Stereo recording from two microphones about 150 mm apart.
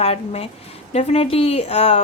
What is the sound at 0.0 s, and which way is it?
Speech, 40° left (ahead or behind).